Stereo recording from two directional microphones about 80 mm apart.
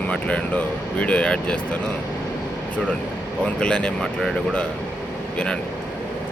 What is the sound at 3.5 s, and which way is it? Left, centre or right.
Speech, centre.